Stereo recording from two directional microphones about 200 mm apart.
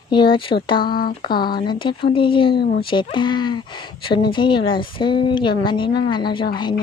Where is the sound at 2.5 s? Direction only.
50° left (ahead or behind).